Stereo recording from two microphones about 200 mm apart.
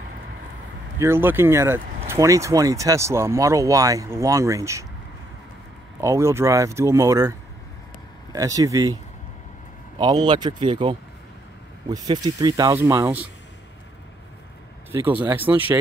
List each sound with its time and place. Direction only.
0.9 s speech: 10° right (ahead or behind)
5.9 s speech: 15° right (ahead or behind)
9.9 s speech: 20° right (ahead or behind)
15.5 s speech: 10° right (ahead or behind)